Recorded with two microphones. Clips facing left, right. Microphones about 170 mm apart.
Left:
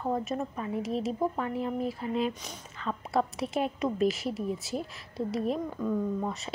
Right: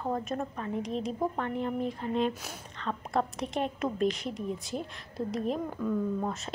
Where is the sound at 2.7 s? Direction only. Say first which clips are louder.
Left 1 dB; 5° left (ahead or behind).